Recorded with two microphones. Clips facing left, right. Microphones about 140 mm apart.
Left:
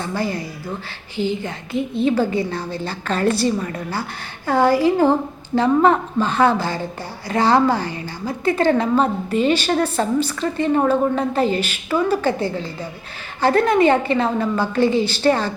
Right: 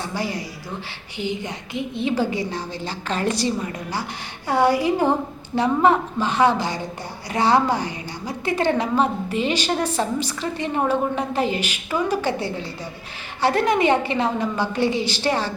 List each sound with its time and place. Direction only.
0.2 s a woman's voice: 15° right (ahead or behind)